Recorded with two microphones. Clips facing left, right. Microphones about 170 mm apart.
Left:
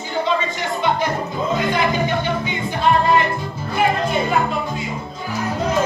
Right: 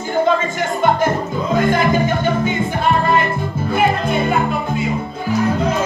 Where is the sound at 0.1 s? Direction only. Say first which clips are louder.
Right 5 dB; 50° right (ahead or behind).